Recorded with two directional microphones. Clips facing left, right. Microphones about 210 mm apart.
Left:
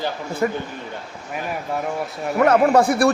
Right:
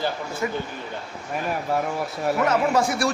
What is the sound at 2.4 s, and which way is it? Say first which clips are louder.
Speech: left 8 dB; 60° left (ahead or behind).